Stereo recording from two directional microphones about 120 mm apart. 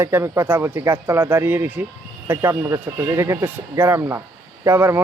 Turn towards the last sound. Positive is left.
turn(degrees=-20)  # may be behind; listen again after turning